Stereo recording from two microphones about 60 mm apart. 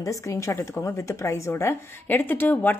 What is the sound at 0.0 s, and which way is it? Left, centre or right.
A woman's voice, left.